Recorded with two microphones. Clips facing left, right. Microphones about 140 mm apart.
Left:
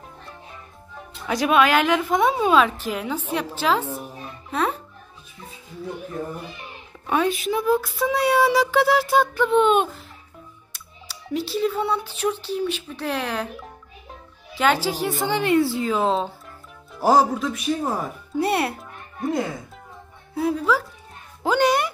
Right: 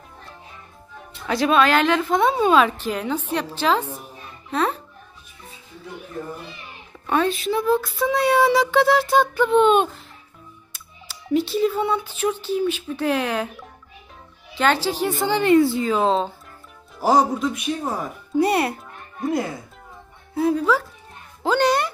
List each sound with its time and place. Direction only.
1.3 s a child's voice: 10° left (ahead or behind)
7.1 s speech: 10° left (ahead or behind)
10.7 s music: centre (ahead or behind)
12.5 s speech: 5° right (ahead or behind)
14.6 s a woman's voice: 5° left (ahead or behind)
21.4 s music: 10° left (ahead or behind)